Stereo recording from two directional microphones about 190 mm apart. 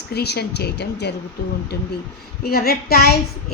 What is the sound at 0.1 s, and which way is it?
A woman's voice, 60° left (ahead or behind).